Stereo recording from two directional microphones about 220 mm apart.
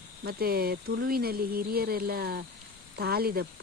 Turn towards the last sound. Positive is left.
turn(degrees=-45)  # may be behind; listen again after turning